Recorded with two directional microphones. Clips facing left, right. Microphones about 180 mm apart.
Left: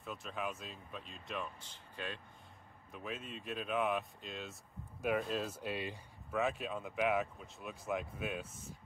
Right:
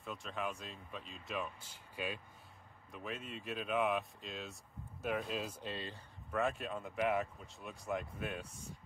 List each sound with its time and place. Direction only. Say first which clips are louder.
0.0 s speech: even; centre (ahead or behind)